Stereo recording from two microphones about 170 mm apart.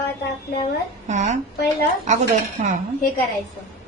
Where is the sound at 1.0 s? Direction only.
45° right (ahead or behind).